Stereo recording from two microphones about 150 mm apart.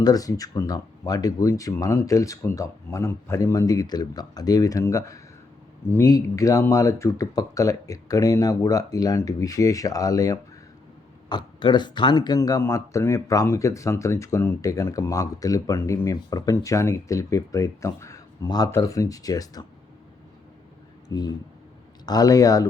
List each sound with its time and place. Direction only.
0.0 s speech: 25° left (ahead or behind)
21.1 s speech: 25° left (ahead or behind)